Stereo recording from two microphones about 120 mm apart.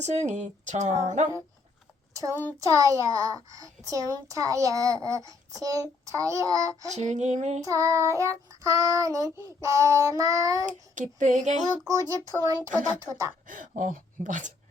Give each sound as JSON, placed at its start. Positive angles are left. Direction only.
{"t": 0.0, "sound": "speech", "side_deg": -75}
{"t": 2.6, "sound": "a child's voice", "side_deg": -25}
{"t": 6.9, "sound": "speech", "side_deg": -80}
{"t": 7.6, "sound": "a child's voice", "side_deg": -25}
{"t": 10.7, "sound": "a sound", "side_deg": -90}
{"t": 11.9, "sound": "a child's voice", "side_deg": -30}
{"t": 14.3, "sound": "a sound", "side_deg": -90}